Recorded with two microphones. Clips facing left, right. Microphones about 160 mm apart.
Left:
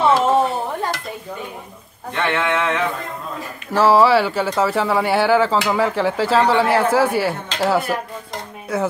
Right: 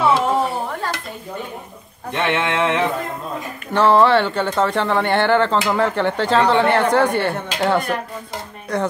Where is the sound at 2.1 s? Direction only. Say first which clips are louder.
Even; 20° right (ahead or behind).